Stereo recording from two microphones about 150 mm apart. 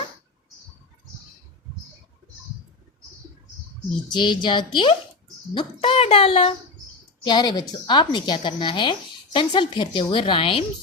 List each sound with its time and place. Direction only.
4.1 s a woman's voice: 30° left (ahead or behind)
7.3 s a woman's voice: 30° left (ahead or behind)